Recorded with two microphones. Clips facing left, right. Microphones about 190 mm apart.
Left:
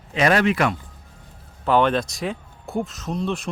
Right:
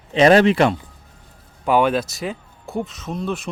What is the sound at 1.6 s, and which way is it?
Speech, 10° right (ahead or behind).